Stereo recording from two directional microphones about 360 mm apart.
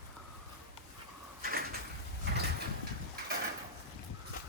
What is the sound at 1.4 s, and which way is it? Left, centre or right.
Bird, right.